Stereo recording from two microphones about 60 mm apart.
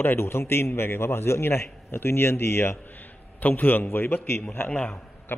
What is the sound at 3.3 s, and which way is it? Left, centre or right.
Speech, left.